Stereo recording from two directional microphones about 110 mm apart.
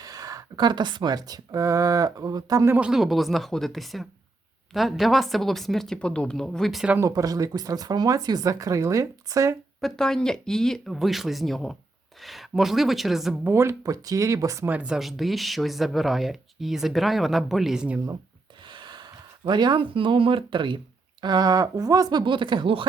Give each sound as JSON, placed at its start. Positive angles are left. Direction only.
{"t": 0.0, "sound": "a woman's voice", "side_deg": -35}
{"t": 2.7, "sound": "speech", "side_deg": -5}
{"t": 7.0, "sound": "a woman's voice", "side_deg": -30}
{"t": 9.8, "sound": "speech", "side_deg": 5}
{"t": 13.4, "sound": "speech", "side_deg": -25}
{"t": 14.7, "sound": "speech", "side_deg": -10}
{"t": 18.7, "sound": "gasp", "side_deg": -45}
{"t": 19.5, "sound": "speech", "side_deg": -40}
{"t": 22.3, "sound": "speech", "side_deg": -45}